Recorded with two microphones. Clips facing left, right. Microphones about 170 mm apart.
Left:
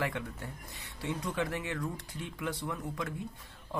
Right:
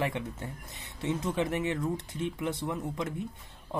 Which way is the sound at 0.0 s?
20° right (ahead or behind).